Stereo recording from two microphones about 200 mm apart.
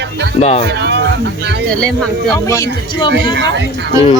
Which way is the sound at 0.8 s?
60° right (ahead or behind).